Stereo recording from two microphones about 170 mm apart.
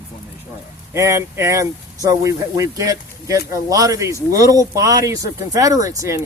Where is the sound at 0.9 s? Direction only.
15° right (ahead or behind).